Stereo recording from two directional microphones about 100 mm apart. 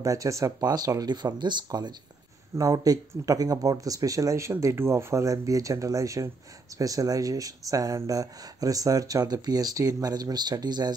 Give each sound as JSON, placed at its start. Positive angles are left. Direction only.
{"t": 0.0, "sound": "speech", "side_deg": -35}